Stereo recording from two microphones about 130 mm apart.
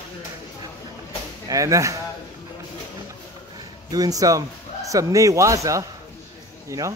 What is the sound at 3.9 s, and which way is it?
A man's voice, 30° right (ahead or behind).